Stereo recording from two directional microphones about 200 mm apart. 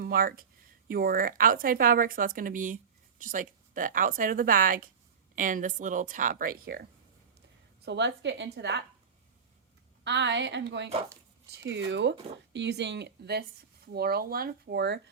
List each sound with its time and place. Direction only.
0.0 s speech: 45° right (ahead or behind)
7.9 s a woman's voice: 60° right (ahead or behind)
10.0 s a woman's voice: 60° right (ahead or behind)